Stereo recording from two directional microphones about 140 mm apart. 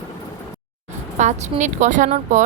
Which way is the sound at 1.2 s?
60° right (ahead or behind).